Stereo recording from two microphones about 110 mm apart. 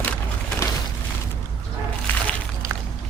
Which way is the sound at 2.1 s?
15° left (ahead or behind).